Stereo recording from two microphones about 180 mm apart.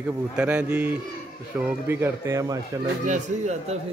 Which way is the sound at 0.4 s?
5° right (ahead or behind).